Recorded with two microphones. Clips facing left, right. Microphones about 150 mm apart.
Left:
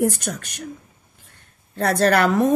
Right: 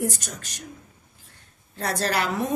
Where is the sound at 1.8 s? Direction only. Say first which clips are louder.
Left 8 dB; 60° left (ahead or behind).